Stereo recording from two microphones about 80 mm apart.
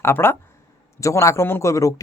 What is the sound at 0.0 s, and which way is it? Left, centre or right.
Speech, left.